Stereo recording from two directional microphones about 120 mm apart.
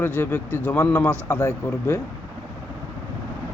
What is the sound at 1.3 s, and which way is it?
Speech, 20° left (ahead or behind).